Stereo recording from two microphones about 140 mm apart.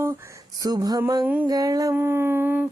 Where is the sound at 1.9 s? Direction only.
15° right (ahead or behind).